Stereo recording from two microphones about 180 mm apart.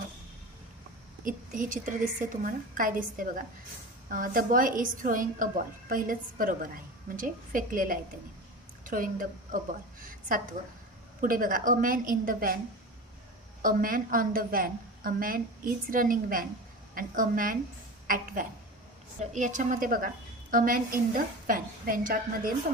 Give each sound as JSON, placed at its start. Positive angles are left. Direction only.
{"t": 1.2, "sound": "a woman's voice", "side_deg": -45}
{"t": 13.6, "sound": "a woman's voice", "side_deg": -50}